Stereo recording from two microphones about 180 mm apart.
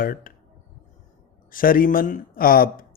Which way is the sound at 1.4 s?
50° left (ahead or behind).